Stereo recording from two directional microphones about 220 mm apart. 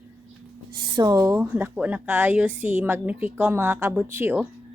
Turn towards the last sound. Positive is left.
turn(degrees=-10)  # may be behind; listen again after turning